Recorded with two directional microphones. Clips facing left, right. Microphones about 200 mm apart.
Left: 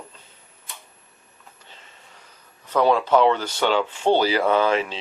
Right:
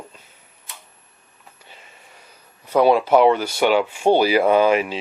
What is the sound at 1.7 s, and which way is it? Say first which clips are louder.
Speech: right 4 dB; 10° right (ahead or behind).